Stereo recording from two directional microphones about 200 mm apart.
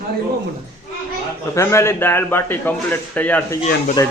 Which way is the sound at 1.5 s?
15° left (ahead or behind).